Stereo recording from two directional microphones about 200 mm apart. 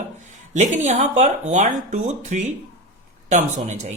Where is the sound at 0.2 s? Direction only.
35° right (ahead or behind).